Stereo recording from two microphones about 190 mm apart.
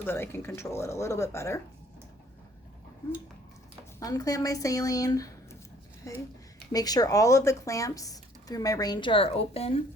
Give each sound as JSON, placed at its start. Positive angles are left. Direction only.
{"t": 0.0, "sound": "speech", "side_deg": 10}
{"t": 4.0, "sound": "speech", "side_deg": 20}